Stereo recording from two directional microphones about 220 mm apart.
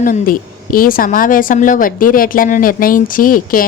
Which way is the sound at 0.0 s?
40° left (ahead or behind).